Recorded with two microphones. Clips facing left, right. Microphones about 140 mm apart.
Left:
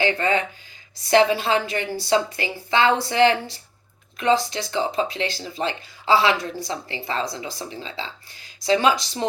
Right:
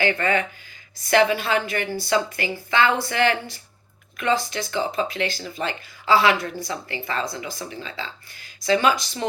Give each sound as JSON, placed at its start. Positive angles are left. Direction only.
{"t": 0.0, "sound": "speech", "side_deg": 25}